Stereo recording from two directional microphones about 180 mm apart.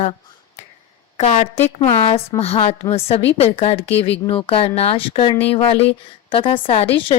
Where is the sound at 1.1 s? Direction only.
40° left (ahead or behind).